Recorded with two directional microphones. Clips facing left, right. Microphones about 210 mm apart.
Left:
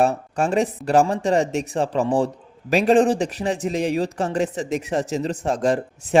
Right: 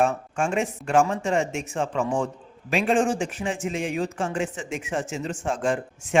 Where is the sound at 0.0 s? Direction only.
35° left (ahead or behind).